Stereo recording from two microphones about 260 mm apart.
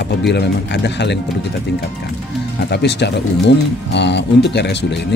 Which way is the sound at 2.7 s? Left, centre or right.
Left.